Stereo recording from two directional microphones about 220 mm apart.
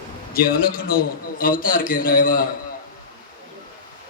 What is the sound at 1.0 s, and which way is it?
A man's voice, 40° left (ahead or behind).